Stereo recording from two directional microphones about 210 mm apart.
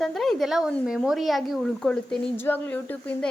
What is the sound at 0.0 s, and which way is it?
Speech, centre (ahead or behind).